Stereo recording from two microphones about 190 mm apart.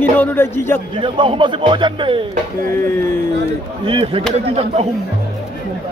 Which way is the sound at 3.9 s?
30° right (ahead or behind).